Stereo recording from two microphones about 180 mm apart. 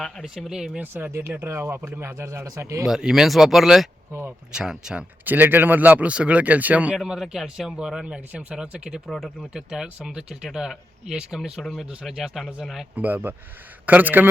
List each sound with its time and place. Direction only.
0.0 s speech: centre (ahead or behind); by 2.8 s 15° right (ahead or behind)
2.8 s speech: centre (ahead or behind)
4.1 s speech: 10° right (ahead or behind)